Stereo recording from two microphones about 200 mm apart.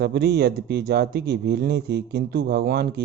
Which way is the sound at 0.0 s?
55° right (ahead or behind).